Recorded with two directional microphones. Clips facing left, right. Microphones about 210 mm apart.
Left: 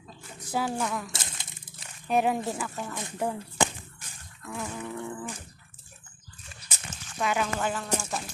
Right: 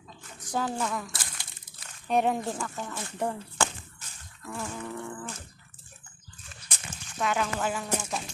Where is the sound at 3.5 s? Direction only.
15° left (ahead or behind).